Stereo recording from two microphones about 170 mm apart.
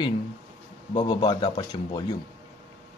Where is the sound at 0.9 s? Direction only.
30° left (ahead or behind).